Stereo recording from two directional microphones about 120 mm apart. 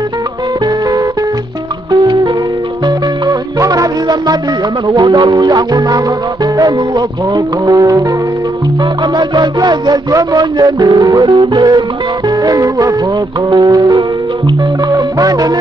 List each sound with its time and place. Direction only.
1.9 s music: 35° right (ahead or behind)
3.5 s music: 30° right (ahead or behind)
7.3 s music: 30° right (ahead or behind)
9.1 s music: 40° right (ahead or behind)